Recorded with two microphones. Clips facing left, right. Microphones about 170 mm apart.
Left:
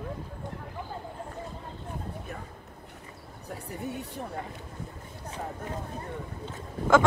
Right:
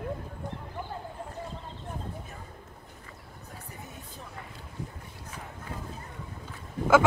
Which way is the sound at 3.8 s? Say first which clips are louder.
Left 10 dB; 70° left (ahead or behind).